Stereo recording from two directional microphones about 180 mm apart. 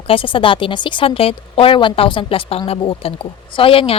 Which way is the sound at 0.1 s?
30° left (ahead or behind).